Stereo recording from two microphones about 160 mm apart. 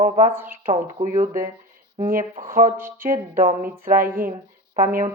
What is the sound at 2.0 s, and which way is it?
Speech, 65° right (ahead or behind).